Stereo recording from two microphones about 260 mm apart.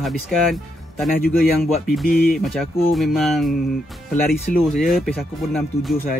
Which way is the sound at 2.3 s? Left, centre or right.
Centre.